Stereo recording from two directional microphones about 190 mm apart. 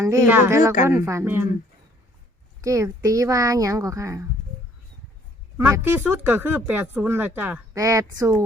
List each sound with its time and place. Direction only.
0.0 s speech: 15° right (ahead or behind)
2.6 s speech: 15° right (ahead or behind)
5.5 s speech: 10° right (ahead or behind)